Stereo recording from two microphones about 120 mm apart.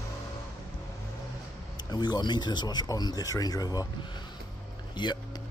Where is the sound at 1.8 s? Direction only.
35° left (ahead or behind).